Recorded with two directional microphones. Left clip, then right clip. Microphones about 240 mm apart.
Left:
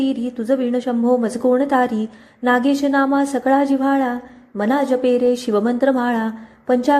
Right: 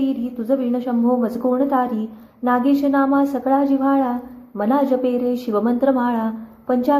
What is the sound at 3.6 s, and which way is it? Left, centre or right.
Speech, left.